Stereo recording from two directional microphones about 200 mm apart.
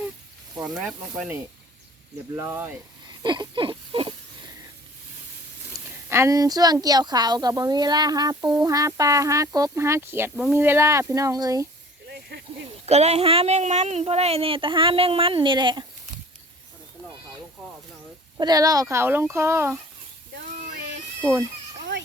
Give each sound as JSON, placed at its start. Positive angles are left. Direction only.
{"t": 0.6, "sound": "speech", "side_deg": -5}
{"t": 3.1, "sound": "a sound", "side_deg": -20}
{"t": 5.7, "sound": "a sound", "side_deg": -20}
{"t": 6.1, "sound": "speech", "side_deg": -15}
{"t": 12.0, "sound": "snake", "side_deg": -55}
{"t": 12.8, "sound": "speech", "side_deg": -30}
{"t": 18.3, "sound": "speech", "side_deg": -20}
{"t": 21.2, "sound": "speech", "side_deg": -10}